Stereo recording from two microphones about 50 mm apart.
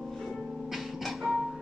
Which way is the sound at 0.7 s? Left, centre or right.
Centre.